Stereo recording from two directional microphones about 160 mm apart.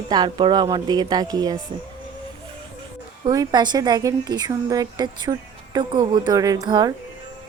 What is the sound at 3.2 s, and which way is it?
A woman's voice, 25° right (ahead or behind).